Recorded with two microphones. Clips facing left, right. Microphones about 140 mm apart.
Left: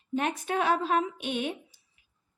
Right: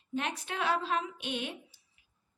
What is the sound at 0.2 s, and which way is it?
Speech, 50° left (ahead or behind).